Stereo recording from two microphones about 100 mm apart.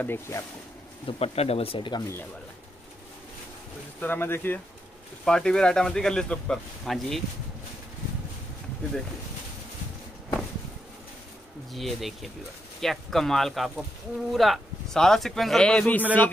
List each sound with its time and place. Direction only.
0.0 s speech: 25° left (ahead or behind)
1.0 s speech: 85° left; by 2.0 s 50° left (ahead or behind)
4.0 s speech: 20° left (ahead or behind)
5.2 s speech: 5° left (ahead or behind)
11.7 s speech: centre (ahead or behind)